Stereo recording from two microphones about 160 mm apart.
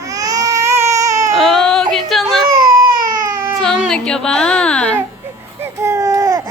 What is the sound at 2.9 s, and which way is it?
Baby cry, 20° right (ahead or behind).